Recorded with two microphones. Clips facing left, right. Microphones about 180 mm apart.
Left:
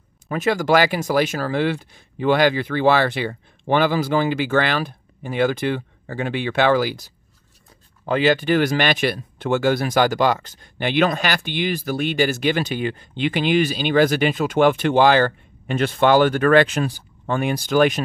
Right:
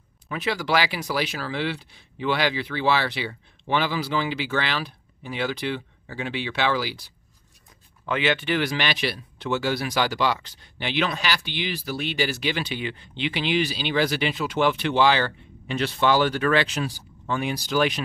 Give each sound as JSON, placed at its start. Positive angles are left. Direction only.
{"t": 0.3, "sound": "speech", "side_deg": 45}
{"t": 8.0, "sound": "speech", "side_deg": 35}